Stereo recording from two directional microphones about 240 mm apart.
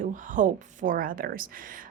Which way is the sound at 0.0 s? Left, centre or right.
Right.